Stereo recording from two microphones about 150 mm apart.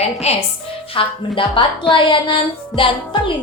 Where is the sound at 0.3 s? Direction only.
45° left (ahead or behind).